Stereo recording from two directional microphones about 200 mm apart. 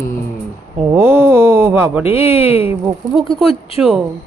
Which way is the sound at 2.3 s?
30° left (ahead or behind).